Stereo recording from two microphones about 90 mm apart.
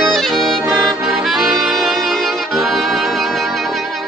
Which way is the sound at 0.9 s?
Centre (ahead or behind).